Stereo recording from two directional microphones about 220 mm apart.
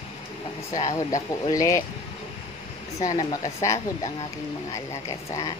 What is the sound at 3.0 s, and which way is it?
A woman's voice, 20° left (ahead or behind).